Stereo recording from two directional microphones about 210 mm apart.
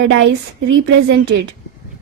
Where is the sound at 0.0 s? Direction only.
60° right (ahead or behind).